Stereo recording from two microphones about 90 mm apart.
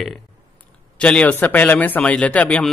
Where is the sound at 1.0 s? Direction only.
10° left (ahead or behind).